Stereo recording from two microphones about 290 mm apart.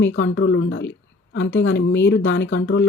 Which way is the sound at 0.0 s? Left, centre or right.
Left.